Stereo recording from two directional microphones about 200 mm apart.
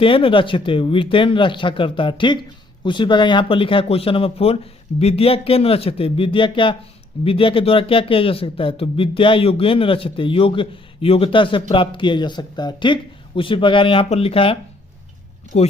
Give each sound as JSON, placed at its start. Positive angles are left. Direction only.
{"t": 0.0, "sound": "speech", "side_deg": 25}